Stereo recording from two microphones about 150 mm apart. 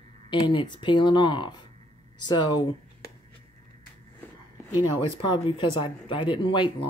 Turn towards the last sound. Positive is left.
turn(degrees=30)  # may be behind; listen again after turning